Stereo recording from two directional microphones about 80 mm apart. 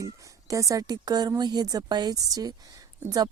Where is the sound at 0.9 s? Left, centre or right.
Right.